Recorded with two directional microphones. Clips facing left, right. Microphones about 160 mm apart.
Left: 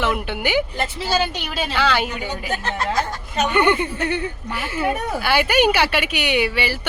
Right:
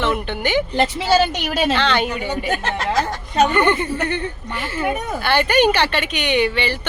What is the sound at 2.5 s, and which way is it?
Speech, 90° right.